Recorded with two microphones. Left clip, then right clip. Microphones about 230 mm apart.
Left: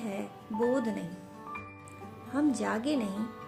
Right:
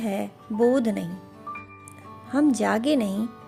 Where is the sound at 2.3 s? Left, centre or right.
Right.